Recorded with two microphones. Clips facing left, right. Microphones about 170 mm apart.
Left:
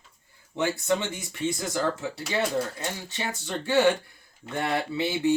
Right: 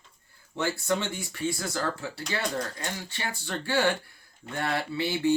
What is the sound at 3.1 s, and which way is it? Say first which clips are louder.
Speech: left 2 dB; 20° left (ahead or behind).